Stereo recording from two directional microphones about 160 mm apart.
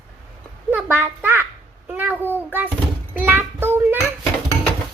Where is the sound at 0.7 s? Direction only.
10° right (ahead or behind).